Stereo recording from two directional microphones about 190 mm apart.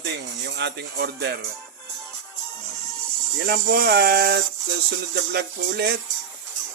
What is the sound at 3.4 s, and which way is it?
Speech, 55° right (ahead or behind).